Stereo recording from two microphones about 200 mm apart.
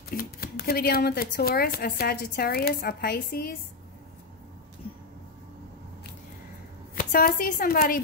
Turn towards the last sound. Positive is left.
turn(degrees=45)  # may be behind; listen again after turning